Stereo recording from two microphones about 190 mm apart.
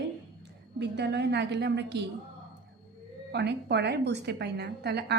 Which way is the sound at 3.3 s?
60° right (ahead or behind).